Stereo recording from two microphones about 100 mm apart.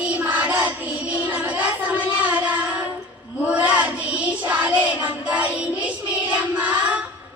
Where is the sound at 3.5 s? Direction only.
15° right (ahead or behind).